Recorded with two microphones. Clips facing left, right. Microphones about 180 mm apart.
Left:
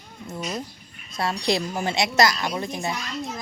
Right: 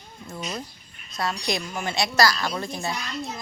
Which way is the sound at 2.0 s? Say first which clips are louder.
Even; 20° left (ahead or behind).